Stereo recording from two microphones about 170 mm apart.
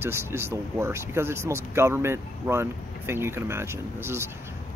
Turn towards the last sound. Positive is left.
turn(degrees=-15)  # may be behind; listen again after turning